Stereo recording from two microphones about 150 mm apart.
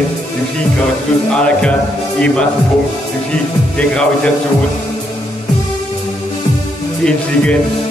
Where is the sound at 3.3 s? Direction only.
5° left (ahead or behind).